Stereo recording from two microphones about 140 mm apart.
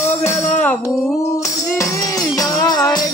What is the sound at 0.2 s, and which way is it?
Music, 60° left (ahead or behind).